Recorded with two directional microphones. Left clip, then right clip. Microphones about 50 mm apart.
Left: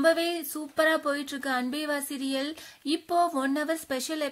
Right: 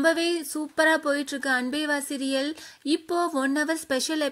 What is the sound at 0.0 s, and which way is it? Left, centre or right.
Speech, right.